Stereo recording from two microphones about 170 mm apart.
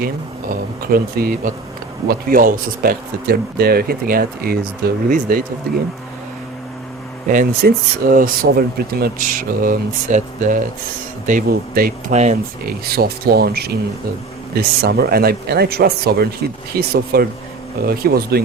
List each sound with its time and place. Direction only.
0.0 s speech: 60° right (ahead or behind)
7.3 s speech: 55° right (ahead or behind)
12.1 s speech: 40° right (ahead or behind)
12.6 s speech: 65° right (ahead or behind)